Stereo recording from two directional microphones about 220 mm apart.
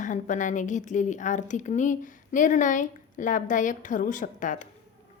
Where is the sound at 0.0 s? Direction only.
35° left (ahead or behind).